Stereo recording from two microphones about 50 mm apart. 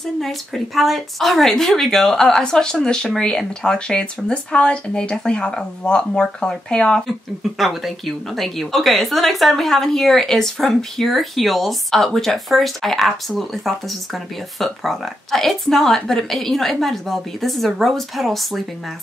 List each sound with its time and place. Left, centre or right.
0.0 s speech: centre
7.1 s speech: centre